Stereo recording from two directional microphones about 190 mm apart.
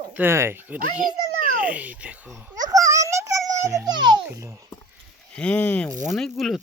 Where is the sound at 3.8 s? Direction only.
25° right (ahead or behind).